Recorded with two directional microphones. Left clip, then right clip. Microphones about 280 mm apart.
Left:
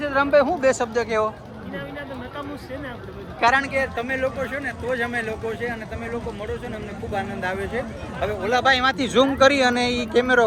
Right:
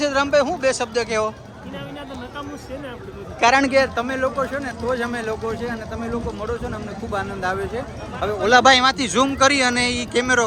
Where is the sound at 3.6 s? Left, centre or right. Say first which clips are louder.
Right 6 dB; right.